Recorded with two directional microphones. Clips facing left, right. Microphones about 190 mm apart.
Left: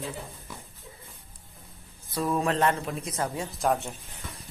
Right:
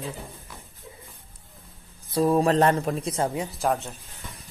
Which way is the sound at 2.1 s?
35° right (ahead or behind).